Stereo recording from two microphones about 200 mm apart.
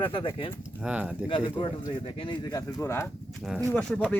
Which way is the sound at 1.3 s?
25° left (ahead or behind).